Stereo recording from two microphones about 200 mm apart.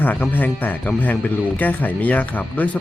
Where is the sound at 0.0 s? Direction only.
10° left (ahead or behind).